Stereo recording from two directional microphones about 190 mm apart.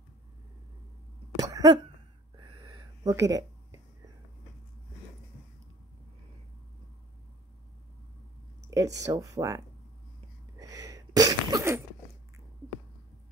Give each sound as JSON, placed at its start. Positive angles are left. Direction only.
{"t": 1.4, "sound": "cough", "side_deg": -20}
{"t": 2.3, "sound": "a sound", "side_deg": -25}
{"t": 8.6, "sound": "speech", "side_deg": -15}
{"t": 10.6, "sound": "sneeze", "side_deg": -15}